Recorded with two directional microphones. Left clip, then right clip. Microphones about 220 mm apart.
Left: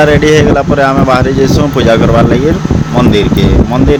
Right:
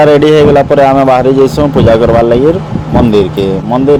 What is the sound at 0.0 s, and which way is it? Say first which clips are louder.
Speech: right 2 dB; 20° right (ahead or behind).